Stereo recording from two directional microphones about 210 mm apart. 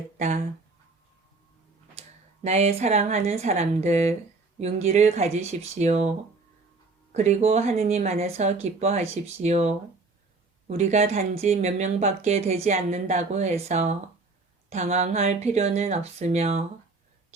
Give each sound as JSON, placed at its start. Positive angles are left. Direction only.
{"t": 2.0, "sound": "speech", "side_deg": -30}
{"t": 7.1, "sound": "speech", "side_deg": -30}